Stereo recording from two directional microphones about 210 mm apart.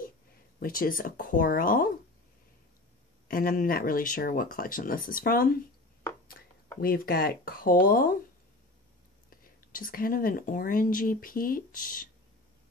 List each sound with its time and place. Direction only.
0.6 s speech: 40° left (ahead or behind)
3.3 s speech: 45° left (ahead or behind)
6.4 s whispering: 60° left (ahead or behind)
6.8 s speech: 45° left (ahead or behind)
9.3 s speech: 40° left (ahead or behind)